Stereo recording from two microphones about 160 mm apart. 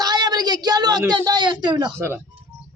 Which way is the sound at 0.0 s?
25° right (ahead or behind).